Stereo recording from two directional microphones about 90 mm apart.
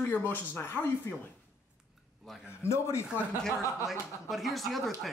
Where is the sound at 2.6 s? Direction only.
30° left (ahead or behind).